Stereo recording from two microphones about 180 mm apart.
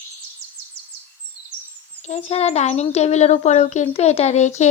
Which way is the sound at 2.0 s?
35° left (ahead or behind).